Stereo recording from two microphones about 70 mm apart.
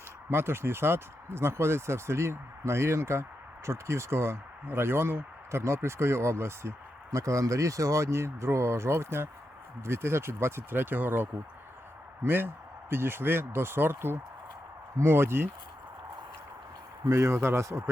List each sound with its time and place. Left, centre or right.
0.3 s speech: right
17.1 s speech: right